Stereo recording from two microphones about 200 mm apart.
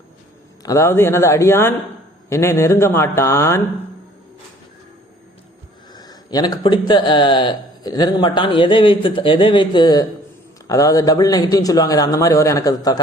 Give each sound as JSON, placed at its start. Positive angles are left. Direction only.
{"t": 0.6, "sound": "a man's voice", "side_deg": 15}
{"t": 5.9, "sound": "a man's voice", "side_deg": 20}